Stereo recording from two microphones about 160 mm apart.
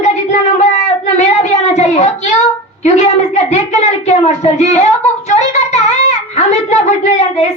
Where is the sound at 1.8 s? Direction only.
45° left (ahead or behind).